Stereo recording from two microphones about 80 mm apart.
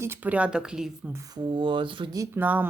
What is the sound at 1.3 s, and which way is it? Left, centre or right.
Speech, right.